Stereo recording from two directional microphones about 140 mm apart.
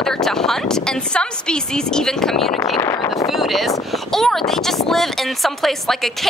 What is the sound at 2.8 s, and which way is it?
Speech, 20° left (ahead or behind).